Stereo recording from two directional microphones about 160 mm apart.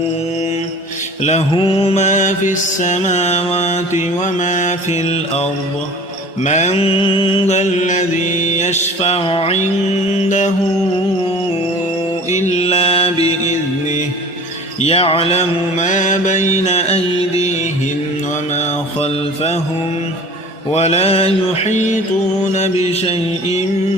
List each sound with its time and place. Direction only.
1.2 s mantra: 45° left (ahead or behind)
10.2 s mantra: 50° left (ahead or behind)
12.3 s music: 45° left (ahead or behind)
14.8 s mantra: 40° left (ahead or behind)
18.5 s mantra: 45° left (ahead or behind)
20.7 s mantra: 40° left (ahead or behind)
22.9 s music: 40° left (ahead or behind)